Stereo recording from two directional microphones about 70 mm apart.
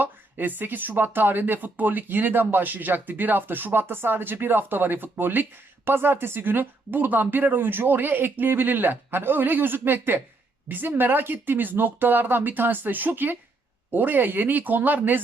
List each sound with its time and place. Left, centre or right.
0.0 s speech: right